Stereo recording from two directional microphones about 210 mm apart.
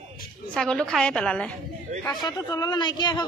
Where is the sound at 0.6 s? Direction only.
5° left (ahead or behind).